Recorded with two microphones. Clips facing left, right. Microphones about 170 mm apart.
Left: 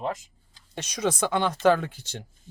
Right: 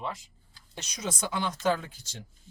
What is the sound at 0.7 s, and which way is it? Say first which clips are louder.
Speech: left 9 dB; 60° left (ahead or behind).